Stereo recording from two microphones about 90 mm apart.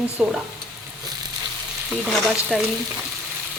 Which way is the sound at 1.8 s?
5° left (ahead or behind).